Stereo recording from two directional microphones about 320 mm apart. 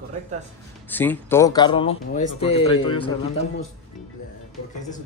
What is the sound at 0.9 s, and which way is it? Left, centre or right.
Speech, centre.